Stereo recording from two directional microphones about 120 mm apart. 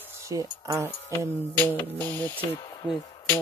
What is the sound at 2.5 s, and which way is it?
Speech, 35° left (ahead or behind).